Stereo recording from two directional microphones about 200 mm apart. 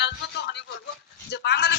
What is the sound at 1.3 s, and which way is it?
Speech, 55° left (ahead or behind).